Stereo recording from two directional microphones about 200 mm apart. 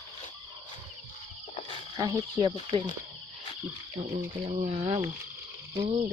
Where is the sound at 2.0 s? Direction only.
20° right (ahead or behind).